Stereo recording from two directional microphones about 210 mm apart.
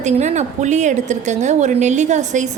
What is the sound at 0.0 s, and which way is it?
A woman's voice, 35° right (ahead or behind).